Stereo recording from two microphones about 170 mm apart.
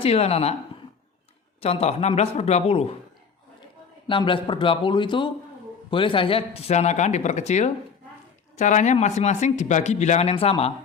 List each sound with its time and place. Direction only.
0.0 s speech: 35° left (ahead or behind)
1.6 s speech: 35° left (ahead or behind)
4.0 s a man's voice: 30° left (ahead or behind)